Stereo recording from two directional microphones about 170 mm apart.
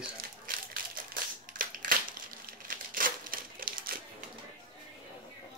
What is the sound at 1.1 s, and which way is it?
Crushing, 55° right (ahead or behind).